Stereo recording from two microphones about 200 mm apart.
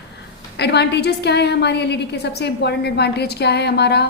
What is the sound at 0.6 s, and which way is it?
A woman's voice, 55° left (ahead or behind).